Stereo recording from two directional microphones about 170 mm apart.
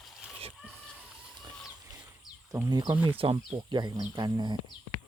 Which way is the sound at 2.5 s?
20° right (ahead or behind).